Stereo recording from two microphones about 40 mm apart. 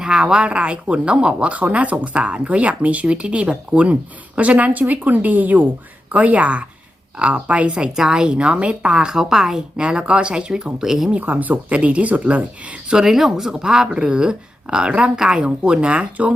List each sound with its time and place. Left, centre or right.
0.0 s speech: right
7.9 s speech: centre
9.0 s speech: centre
9.8 s speech: right; by 11.1 s centre
11.2 s speech: right
11.8 s speech: right
12.9 s speech: centre; by 16.3 s right